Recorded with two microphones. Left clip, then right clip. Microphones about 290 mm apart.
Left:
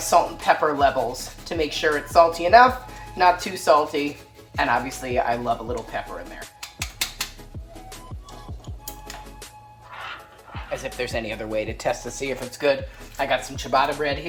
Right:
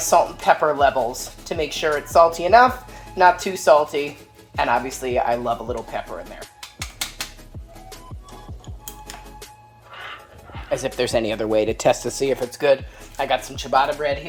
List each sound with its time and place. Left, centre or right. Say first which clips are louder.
0.1 s speech: right 2 dB; right
10.7 s speech: right 7 dB; right